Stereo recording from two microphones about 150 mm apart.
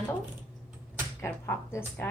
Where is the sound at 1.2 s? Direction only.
15° left (ahead or behind).